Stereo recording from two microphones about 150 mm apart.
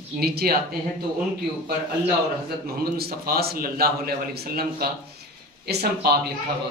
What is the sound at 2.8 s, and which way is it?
A man's voice, 90° right.